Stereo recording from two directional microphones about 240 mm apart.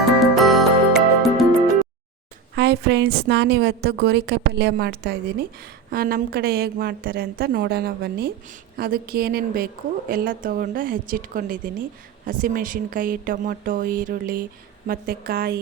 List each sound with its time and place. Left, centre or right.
0.2 s music: centre
2.6 s a woman's voice: right